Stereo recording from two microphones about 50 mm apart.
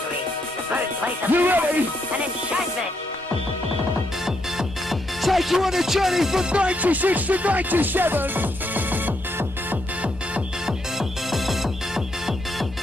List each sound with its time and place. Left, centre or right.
0.7 s music: right
4.6 s music: centre
6.5 s music: right
11.0 s music: centre